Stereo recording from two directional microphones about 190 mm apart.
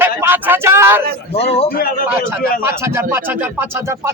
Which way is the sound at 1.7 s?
55° left (ahead or behind).